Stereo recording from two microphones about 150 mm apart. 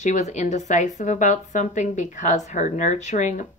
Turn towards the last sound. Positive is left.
turn(degrees=55)  # may be behind; listen again after turning